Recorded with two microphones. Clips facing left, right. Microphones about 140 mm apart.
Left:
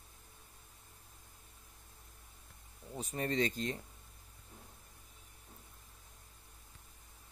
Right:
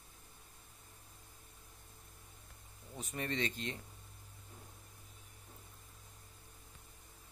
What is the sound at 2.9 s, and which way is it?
Speech, 35° left (ahead or behind).